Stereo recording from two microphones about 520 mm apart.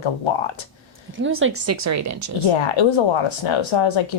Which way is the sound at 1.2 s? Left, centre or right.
Right.